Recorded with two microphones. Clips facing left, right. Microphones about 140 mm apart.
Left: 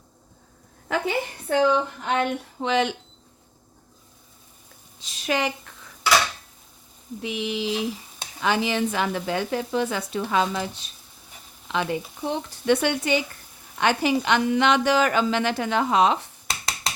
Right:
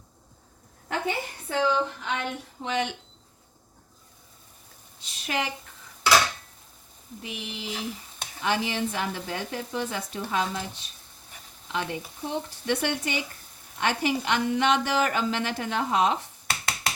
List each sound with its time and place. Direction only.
0.9 s a woman's voice: 90° left
2.0 s a sound: 55° left (ahead or behind)
2.6 s a woman's voice: 90° left
4.9 s a sound: 90° left
7.2 s a woman's voice: 90° left
11.7 s a woman's voice: 90° left
16.5 s computer keyboard: 30° left (ahead or behind)